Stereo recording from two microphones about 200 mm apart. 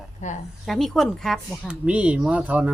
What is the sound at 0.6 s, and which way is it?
Speech, centre (ahead or behind).